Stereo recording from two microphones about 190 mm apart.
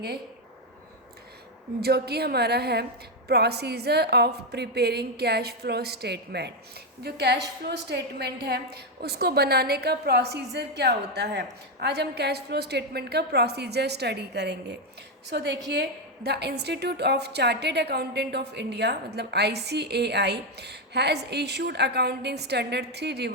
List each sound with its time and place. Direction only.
1.8 s a woman's voice: 55° right (ahead or behind)